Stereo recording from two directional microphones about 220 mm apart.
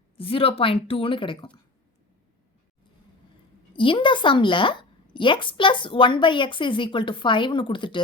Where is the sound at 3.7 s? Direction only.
25° left (ahead or behind).